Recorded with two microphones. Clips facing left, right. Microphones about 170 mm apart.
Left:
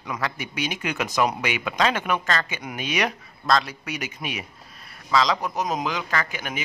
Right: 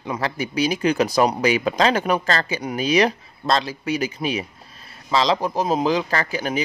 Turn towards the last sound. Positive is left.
turn(degrees=-35)  # may be behind; listen again after turning